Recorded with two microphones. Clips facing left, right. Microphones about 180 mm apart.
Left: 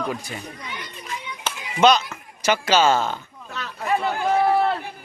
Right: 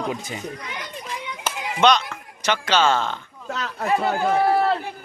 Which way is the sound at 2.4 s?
10° left (ahead or behind).